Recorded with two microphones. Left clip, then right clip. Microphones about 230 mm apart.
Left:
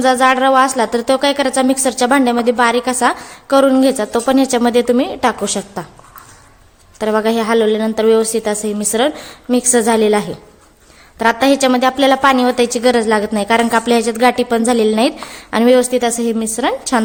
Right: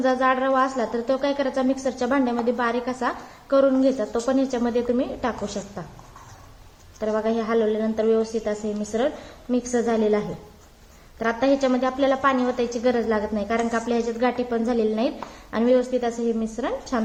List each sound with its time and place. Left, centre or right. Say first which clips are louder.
0.0 s a woman's voice: left 9 dB; left
7.0 s a woman's voice: left 9 dB; left